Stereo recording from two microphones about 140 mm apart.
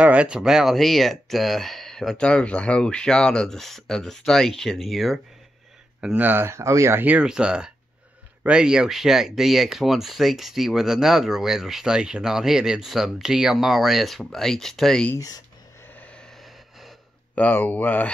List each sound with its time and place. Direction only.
0.0 s speech: 10° right (ahead or behind)
15.1 s speech: 25° left (ahead or behind)
15.9 s vehicle: 10° left (ahead or behind)
17.4 s speech: 10° left (ahead or behind)